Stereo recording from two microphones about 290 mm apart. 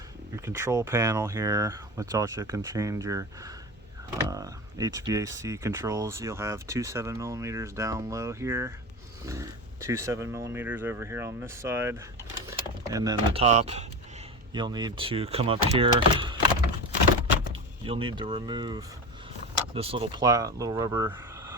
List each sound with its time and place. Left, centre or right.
0.4 s speech: centre
17.8 s speech: centre